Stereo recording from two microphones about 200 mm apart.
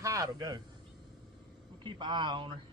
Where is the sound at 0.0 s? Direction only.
15° right (ahead or behind).